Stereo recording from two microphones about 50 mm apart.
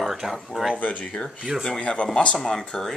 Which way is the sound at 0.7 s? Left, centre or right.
Left.